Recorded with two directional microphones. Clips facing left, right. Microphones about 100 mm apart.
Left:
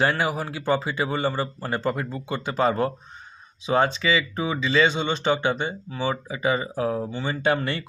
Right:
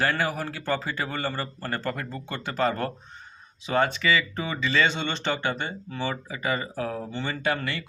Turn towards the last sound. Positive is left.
turn(degrees=30)  # may be behind; listen again after turning